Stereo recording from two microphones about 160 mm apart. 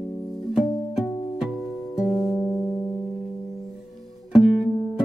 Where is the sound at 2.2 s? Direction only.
15° left (ahead or behind).